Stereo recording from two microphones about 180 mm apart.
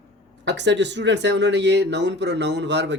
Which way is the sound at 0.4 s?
75° right (ahead or behind).